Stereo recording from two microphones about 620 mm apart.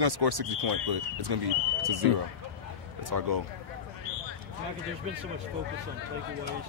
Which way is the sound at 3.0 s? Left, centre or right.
Right.